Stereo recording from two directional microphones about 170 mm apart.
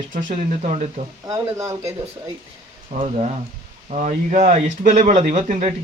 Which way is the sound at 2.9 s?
35° right (ahead or behind).